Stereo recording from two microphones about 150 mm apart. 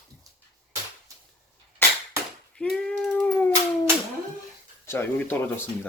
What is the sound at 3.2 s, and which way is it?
Cat, 10° left (ahead or behind).